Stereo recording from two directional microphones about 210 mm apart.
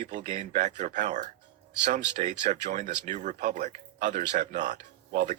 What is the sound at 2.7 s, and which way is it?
Speech, 35° right (ahead or behind).